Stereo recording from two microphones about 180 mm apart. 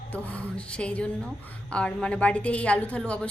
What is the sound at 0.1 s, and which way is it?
A woman's voice, 5° left (ahead or behind).